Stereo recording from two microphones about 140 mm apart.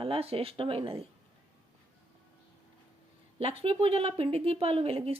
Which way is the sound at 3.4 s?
40° right (ahead or behind).